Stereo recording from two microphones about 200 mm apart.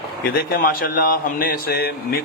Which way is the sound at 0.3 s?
50° left (ahead or behind).